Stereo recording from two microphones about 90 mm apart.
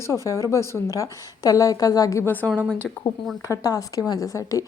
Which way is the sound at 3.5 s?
45° left (ahead or behind).